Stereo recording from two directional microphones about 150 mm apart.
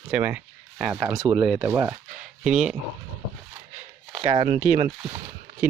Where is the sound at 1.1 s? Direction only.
25° right (ahead or behind).